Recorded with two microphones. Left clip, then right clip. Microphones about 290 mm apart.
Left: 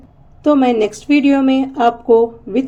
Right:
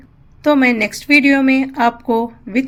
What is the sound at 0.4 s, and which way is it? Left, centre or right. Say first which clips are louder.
Speech: left 1 dB; right.